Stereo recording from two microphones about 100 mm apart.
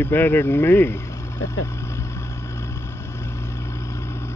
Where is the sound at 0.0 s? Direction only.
20° left (ahead or behind).